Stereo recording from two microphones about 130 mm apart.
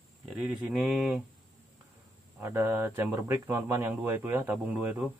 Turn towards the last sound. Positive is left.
turn(degrees=-15)  # may be behind; listen again after turning